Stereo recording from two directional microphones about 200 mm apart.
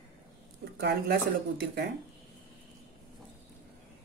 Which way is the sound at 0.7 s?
55° right (ahead or behind).